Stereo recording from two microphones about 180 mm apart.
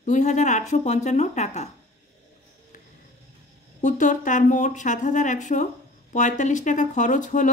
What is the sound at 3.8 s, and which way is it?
A woman's voice, 45° left (ahead or behind).